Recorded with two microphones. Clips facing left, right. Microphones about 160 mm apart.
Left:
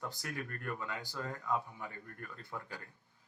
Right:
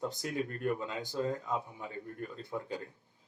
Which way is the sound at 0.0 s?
20° right (ahead or behind).